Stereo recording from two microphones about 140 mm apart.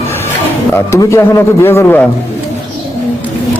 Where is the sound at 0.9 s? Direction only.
20° left (ahead or behind).